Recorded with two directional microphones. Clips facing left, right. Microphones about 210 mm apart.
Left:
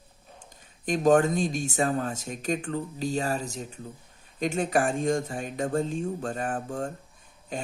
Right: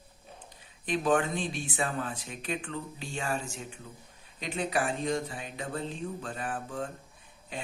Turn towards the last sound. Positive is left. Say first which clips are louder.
# left 5 dB
turn(degrees=45)  # may be behind; listen again after turning